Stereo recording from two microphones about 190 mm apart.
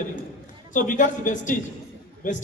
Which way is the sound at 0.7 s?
45° left (ahead or behind).